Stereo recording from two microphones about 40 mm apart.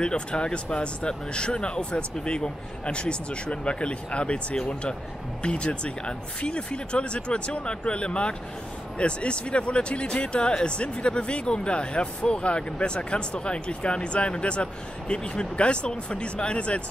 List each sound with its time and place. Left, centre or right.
0.0 s speech: left